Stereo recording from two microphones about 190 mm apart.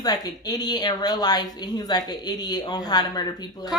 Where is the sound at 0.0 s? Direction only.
20° left (ahead or behind).